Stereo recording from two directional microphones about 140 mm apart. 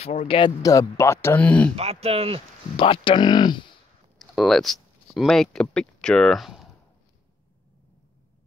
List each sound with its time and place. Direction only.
0.0 s speech: 60° left (ahead or behind)
0.6 s speech: 25° left (ahead or behind); by 1.7 s 10° left (ahead or behind)
1.8 s speech: 45° right (ahead or behind)
2.8 s speech: 40° left (ahead or behind)
4.2 s speech: centre (ahead or behind)